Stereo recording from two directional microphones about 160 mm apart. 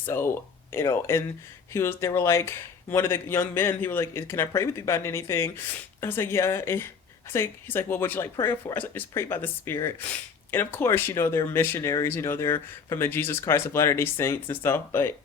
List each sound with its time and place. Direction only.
0.0 s speech: 15° left (ahead or behind)